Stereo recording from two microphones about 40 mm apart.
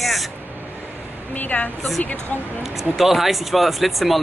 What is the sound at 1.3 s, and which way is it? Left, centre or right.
Speech, left.